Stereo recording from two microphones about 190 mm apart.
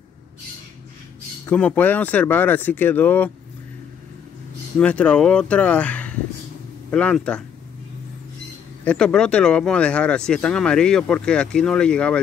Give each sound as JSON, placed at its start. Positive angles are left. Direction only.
{"t": 1.4, "sound": "speech", "side_deg": 5}
{"t": 4.7, "sound": "speech", "side_deg": 5}
{"t": 8.8, "sound": "speech", "side_deg": 5}